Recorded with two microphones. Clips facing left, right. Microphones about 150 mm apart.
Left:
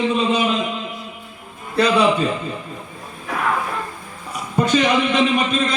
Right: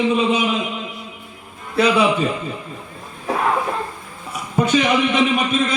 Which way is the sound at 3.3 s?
30° right (ahead or behind).